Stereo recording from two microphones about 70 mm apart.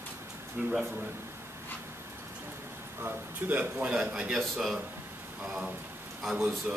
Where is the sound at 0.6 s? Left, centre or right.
Centre.